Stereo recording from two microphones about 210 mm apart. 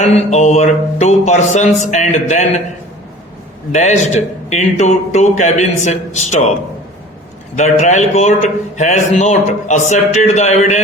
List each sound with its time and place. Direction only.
0.0 s a man's voice: 35° left (ahead or behind)
3.7 s a man's voice: 35° left (ahead or behind)
7.5 s a man's voice: 35° left (ahead or behind)